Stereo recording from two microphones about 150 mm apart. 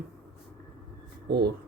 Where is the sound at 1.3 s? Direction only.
90° right.